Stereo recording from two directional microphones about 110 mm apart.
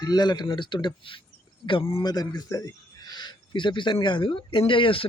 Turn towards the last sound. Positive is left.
turn(degrees=50)  # may be behind; listen again after turning